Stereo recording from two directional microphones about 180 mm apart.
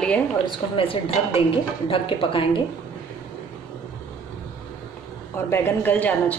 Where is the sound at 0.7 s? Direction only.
30° left (ahead or behind).